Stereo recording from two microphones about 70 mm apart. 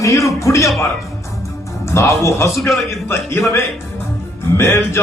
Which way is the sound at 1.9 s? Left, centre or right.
Left.